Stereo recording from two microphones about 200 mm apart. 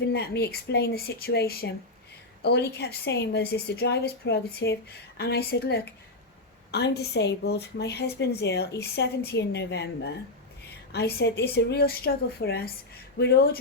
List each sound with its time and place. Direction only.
0.1 s a woman's voice: 55° left (ahead or behind)